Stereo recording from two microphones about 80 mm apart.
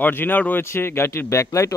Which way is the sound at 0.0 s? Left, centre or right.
Left.